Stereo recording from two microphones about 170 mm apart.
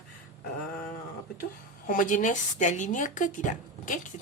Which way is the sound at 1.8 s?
50° left (ahead or behind).